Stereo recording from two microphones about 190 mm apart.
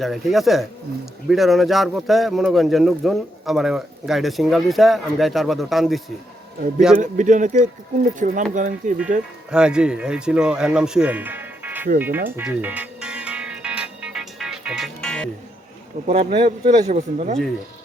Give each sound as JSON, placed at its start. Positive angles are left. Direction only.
{"t": 0.0, "sound": "speech", "side_deg": 0}
{"t": 6.9, "sound": "speech", "side_deg": -40}
{"t": 9.5, "sound": "speech", "side_deg": -5}
{"t": 11.9, "sound": "music", "side_deg": -10}
{"t": 16.0, "sound": "speech", "side_deg": -30}